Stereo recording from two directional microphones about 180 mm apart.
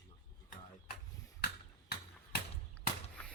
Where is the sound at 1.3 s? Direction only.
60° left (ahead or behind).